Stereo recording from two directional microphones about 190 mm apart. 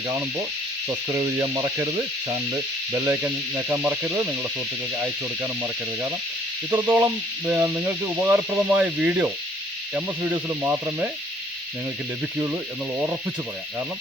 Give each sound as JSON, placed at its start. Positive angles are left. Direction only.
{"t": 0.9, "sound": "speech", "side_deg": -20}